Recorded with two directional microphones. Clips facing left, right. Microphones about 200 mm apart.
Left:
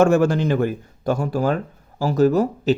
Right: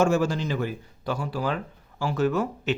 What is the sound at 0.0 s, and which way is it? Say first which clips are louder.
A man's voice: left 6 dB; 55° left (ahead or behind).